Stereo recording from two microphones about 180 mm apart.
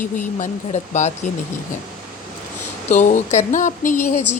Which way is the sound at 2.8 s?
40° left (ahead or behind).